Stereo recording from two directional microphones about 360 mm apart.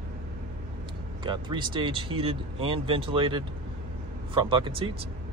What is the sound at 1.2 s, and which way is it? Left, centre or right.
Speech, centre.